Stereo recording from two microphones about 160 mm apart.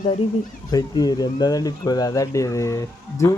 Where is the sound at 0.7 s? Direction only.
25° left (ahead or behind).